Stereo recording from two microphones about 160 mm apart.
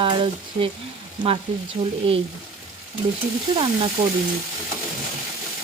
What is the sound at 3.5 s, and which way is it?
Speech, 30° right (ahead or behind).